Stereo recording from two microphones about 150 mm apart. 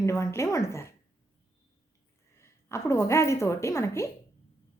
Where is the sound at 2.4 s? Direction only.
20° left (ahead or behind).